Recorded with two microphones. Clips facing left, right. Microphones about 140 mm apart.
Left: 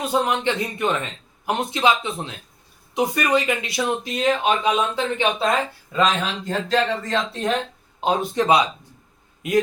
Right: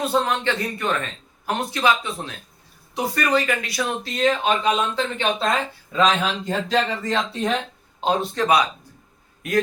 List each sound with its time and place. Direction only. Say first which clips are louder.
0.0 s a man's voice: even; 15° left (ahead or behind)
8.4 s a man's voice: left 1 dB; 25° left (ahead or behind)